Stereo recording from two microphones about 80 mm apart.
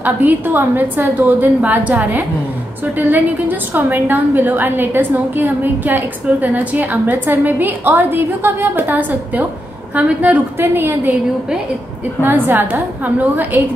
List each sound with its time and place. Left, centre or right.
0.0 s a woman's voice: right
12.2 s a woman's voice: right